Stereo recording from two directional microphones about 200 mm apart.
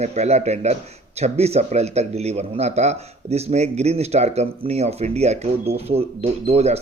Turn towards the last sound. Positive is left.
turn(degrees=-30)  # may be behind; listen again after turning